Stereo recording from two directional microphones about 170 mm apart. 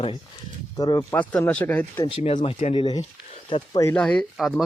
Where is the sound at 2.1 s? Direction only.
30° left (ahead or behind).